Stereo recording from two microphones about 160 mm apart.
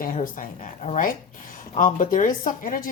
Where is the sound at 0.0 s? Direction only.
55° left (ahead or behind).